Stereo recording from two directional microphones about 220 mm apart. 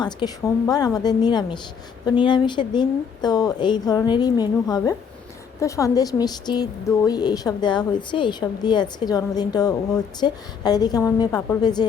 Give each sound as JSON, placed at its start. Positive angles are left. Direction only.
{"t": 0.0, "sound": "a woman's voice", "side_deg": 20}